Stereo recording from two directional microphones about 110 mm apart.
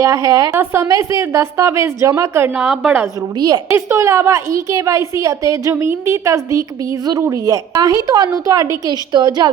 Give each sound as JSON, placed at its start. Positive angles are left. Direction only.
{"t": 0.0, "sound": "a woman's voice", "side_deg": -30}
{"t": 0.5, "sound": "a woman's voice", "side_deg": -20}
{"t": 2.6, "sound": "a woman's voice", "side_deg": -10}
{"t": 3.4, "sound": "a woman's voice", "side_deg": -35}